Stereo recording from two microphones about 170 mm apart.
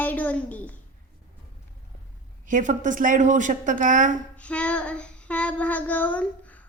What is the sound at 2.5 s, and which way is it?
A woman's voice, 50° right (ahead or behind).